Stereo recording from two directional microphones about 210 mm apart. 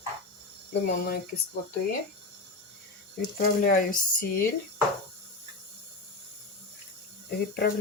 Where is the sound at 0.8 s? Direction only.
50° left (ahead or behind).